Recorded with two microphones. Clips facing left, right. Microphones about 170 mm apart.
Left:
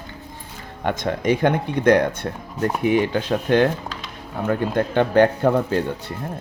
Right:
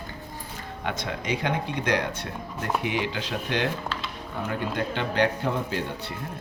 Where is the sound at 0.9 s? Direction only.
50° left (ahead or behind).